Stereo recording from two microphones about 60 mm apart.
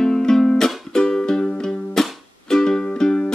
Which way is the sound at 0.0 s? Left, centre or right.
Centre.